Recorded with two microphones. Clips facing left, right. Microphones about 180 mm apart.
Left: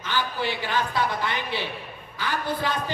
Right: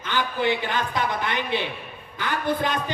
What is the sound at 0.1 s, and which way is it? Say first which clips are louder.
Speech: right 4 dB; 20° right (ahead or behind).